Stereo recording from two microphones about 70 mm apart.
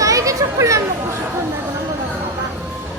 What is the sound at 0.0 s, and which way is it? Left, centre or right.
Children playing, right.